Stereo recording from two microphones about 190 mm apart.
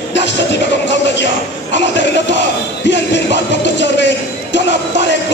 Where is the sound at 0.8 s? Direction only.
70° left (ahead or behind).